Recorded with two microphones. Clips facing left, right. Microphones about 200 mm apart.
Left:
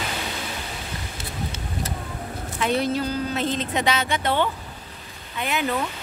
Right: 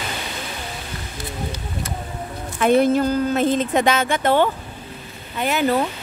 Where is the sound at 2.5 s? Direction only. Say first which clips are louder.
Right 8 dB; 50° right (ahead or behind).